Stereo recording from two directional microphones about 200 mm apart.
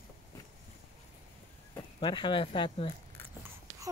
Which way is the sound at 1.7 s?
25° left (ahead or behind).